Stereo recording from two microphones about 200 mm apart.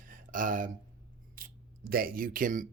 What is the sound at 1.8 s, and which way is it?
Speech, 45° right (ahead or behind).